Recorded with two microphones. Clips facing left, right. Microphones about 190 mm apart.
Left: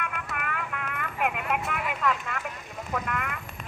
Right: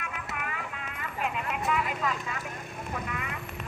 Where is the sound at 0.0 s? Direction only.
60° left (ahead or behind).